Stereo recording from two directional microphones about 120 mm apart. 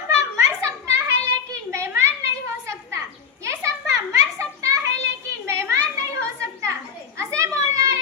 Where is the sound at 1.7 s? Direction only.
25° right (ahead or behind).